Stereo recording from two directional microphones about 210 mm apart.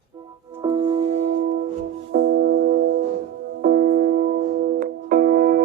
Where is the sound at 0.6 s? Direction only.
20° right (ahead or behind).